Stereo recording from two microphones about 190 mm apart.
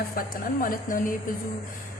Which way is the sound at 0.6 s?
45° left (ahead or behind).